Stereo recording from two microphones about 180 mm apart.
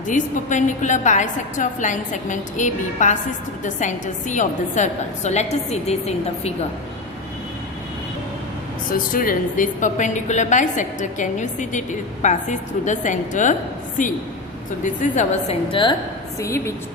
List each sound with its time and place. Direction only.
0.1 s a woman's voice: 45° left (ahead or behind)
8.9 s a woman's voice: 50° left (ahead or behind)
15.7 s a woman's voice: 25° left (ahead or behind)
16.4 s a woman's voice: 15° left (ahead or behind)